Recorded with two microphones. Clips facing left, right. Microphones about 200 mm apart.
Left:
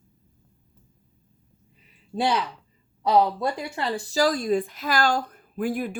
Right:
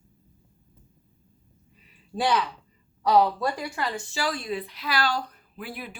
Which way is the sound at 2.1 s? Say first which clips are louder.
Left 1 dB; 25° left (ahead or behind).